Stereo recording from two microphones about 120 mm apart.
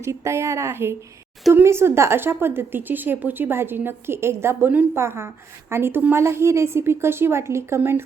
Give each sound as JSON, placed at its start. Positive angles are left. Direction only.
{"t": 0.0, "sound": "a woman's voice", "side_deg": -25}